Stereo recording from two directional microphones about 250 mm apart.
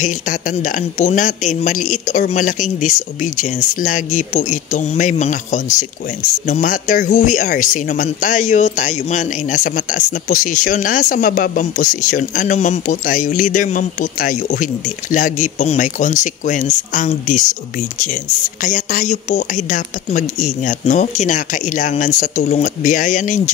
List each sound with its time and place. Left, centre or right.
0.0 s speech: left